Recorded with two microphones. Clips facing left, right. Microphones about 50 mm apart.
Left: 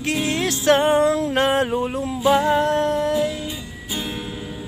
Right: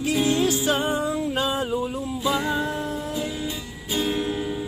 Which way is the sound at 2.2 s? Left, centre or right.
Left.